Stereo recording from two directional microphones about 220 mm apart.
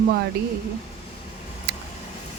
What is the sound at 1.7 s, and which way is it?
Vehicle, 45° right (ahead or behind).